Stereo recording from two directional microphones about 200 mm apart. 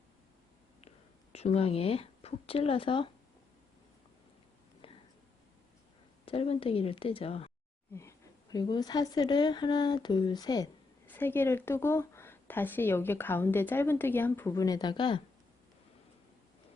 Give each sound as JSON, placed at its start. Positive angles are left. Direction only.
{"t": 0.9, "sound": "a woman's voice", "side_deg": 30}
{"t": 4.8, "sound": "whispering", "side_deg": 25}
{"t": 6.2, "sound": "speech", "side_deg": 30}
{"t": 7.9, "sound": "a woman's voice", "side_deg": 15}